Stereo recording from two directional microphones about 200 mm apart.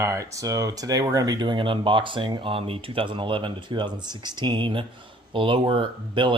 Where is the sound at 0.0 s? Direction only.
15° right (ahead or behind).